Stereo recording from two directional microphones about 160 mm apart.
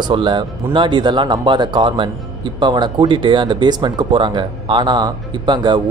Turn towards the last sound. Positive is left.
turn(degrees=-30)  # may be behind; listen again after turning